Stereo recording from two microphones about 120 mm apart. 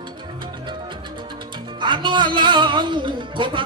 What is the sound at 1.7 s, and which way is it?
Music, 40° right (ahead or behind).